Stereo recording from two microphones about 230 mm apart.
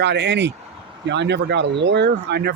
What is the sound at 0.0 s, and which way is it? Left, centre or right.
Speech, right.